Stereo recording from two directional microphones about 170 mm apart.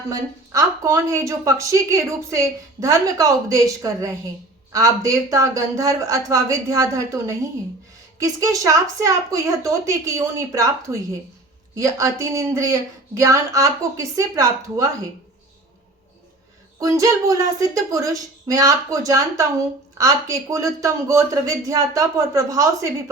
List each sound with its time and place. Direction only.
0.1 s a woman's voice: 20° right (ahead or behind)
16.8 s a woman's voice: 20° right (ahead or behind)